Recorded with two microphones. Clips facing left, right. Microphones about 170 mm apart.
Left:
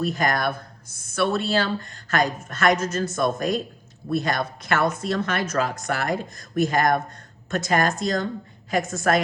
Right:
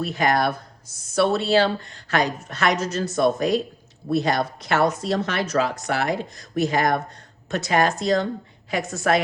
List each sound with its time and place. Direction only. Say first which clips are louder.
0.0 s speech: right 2 dB; 45° left (ahead or behind)